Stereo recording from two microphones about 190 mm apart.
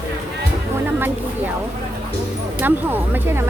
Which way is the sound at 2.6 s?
10° right (ahead or behind).